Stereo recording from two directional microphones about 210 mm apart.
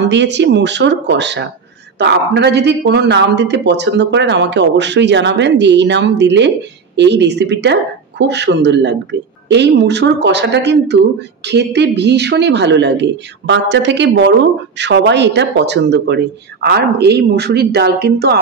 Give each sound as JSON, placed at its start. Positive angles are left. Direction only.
{"t": 0.1, "sound": "speech", "side_deg": -55}